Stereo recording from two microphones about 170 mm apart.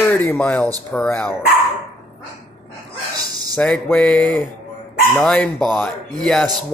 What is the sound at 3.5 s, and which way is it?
Speech, 5° left (ahead or behind).